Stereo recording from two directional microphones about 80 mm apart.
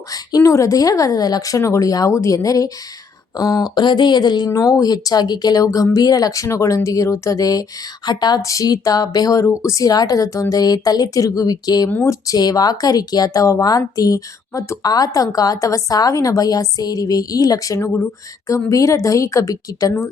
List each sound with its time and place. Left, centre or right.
0.1 s speech: left
3.8 s speech: left
8.0 s a sound: left
8.4 s speech: left
17.7 s speech: left